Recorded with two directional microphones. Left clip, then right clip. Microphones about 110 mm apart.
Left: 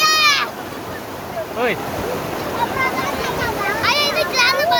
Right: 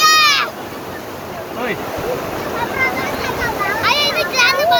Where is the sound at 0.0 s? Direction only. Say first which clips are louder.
Right 3 dB; 45° left (ahead or behind).